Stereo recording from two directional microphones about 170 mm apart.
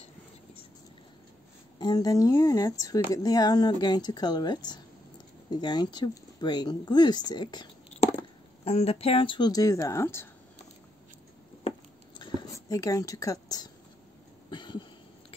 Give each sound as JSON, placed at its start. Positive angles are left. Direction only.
{"t": 1.8, "sound": "speech", "side_deg": 25}
{"t": 8.6, "sound": "speech", "side_deg": 35}
{"t": 12.2, "sound": "a sound", "side_deg": 20}